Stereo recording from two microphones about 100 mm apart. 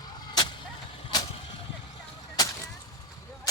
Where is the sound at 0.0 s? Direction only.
45° left (ahead or behind).